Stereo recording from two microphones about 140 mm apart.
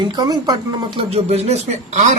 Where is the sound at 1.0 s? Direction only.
50° right (ahead or behind).